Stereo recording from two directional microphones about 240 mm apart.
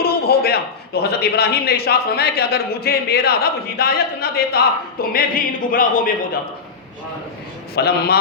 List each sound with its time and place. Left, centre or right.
0.0 s a man's voice: left
7.8 s speech: left